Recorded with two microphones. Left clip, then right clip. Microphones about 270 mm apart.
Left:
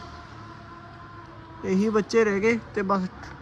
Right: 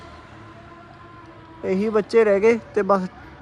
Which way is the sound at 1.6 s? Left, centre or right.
Centre.